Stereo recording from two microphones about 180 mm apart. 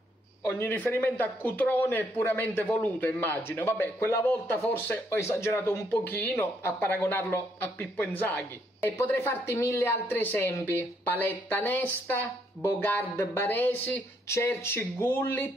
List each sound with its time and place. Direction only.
0.4 s speech: 10° left (ahead or behind)